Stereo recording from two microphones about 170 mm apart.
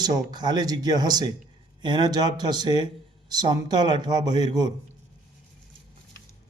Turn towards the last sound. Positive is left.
turn(degrees=-25)  # may be behind; listen again after turning